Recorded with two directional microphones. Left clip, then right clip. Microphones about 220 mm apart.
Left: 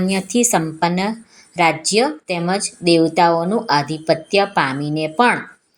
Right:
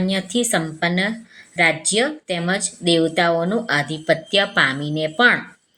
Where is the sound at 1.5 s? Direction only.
20° left (ahead or behind).